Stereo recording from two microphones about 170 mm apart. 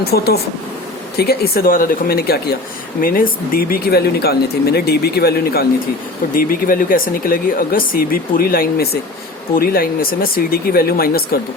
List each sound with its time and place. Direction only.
0.0 s speech: 70° left (ahead or behind)
6.3 s speech: 55° left (ahead or behind)